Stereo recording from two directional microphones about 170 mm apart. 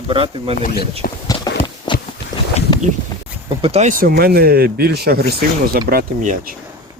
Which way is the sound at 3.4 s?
35° right (ahead or behind).